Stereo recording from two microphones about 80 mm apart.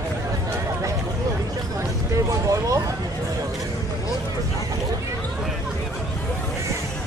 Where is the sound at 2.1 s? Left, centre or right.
Right.